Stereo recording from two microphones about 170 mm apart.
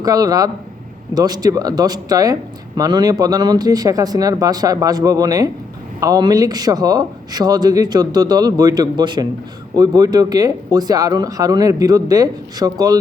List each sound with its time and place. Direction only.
0.0 s speech: 20° right (ahead or behind)